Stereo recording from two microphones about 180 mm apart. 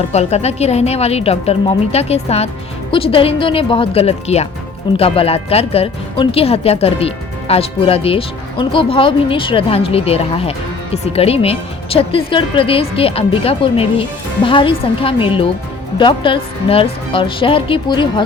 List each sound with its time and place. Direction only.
0.1 s speech: 35° left (ahead or behind)